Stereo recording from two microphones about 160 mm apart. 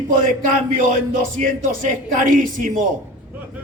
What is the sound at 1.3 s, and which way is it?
Speech, 55° right (ahead or behind).